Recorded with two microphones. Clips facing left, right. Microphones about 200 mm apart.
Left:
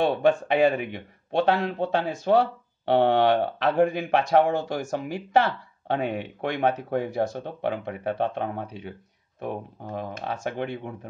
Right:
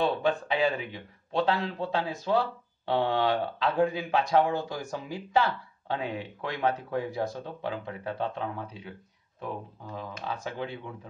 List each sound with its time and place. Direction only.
0.3 s a man's voice: 50° left (ahead or behind); by 4.8 s 75° left (ahead or behind)
4.8 s speech: 60° left (ahead or behind)